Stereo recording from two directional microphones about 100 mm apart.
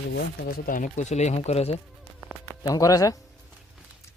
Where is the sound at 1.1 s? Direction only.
90° left.